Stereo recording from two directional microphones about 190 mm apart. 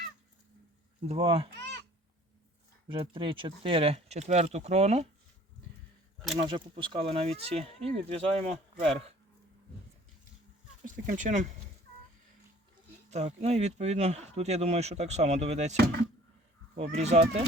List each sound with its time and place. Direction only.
1.0 s speech: 30° right (ahead or behind)
2.9 s speech: 25° right (ahead or behind)
6.4 s speech: 25° right (ahead or behind)
10.8 s speech: 45° right (ahead or behind)
13.1 s speech: 35° right (ahead or behind)
16.7 s speech: 35° right (ahead or behind)